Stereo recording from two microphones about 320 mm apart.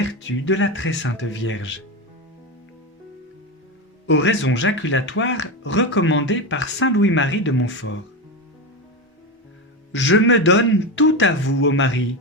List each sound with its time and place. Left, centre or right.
0.0 s speech: left
4.0 s speech: left
9.9 s speech: left